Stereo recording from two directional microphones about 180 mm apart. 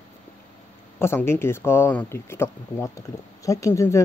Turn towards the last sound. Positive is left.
turn(degrees=15)  # may be behind; listen again after turning